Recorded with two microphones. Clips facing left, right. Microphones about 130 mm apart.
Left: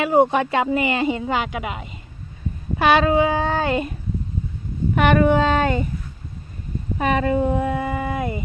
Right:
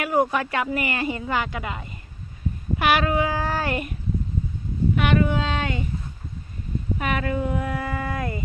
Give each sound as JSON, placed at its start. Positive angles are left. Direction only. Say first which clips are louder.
{"t": 0.0, "sound": "speech", "louder": "left 5 dB", "side_deg": 25}
{"t": 5.2, "sound": "speech", "louder": "left 7 dB", "side_deg": 50}
{"t": 7.0, "sound": "speech", "louder": "left 7 dB", "side_deg": 30}